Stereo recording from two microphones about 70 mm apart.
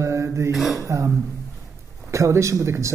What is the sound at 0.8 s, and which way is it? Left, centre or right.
Speech, right.